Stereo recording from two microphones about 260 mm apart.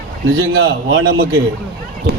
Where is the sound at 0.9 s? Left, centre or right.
Right.